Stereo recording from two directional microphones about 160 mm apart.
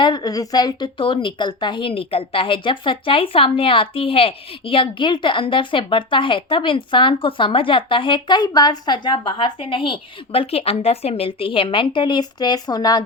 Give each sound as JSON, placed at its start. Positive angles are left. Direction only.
{"t": 0.0, "sound": "a woman's voice", "side_deg": 25}